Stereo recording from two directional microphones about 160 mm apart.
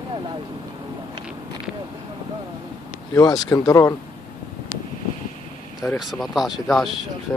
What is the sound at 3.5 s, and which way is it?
Speech, 20° left (ahead or behind).